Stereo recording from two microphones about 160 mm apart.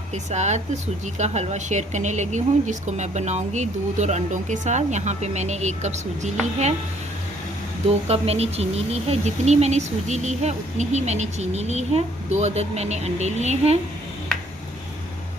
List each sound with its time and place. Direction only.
0.1 s speech: 45° right (ahead or behind)
7.9 s speech: 40° right (ahead or behind)